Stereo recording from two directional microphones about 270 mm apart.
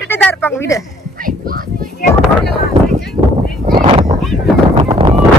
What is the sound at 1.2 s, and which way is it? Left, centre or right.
Children playing, right.